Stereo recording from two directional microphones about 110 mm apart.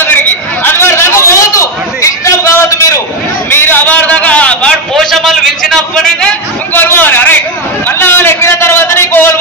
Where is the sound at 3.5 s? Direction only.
20° left (ahead or behind).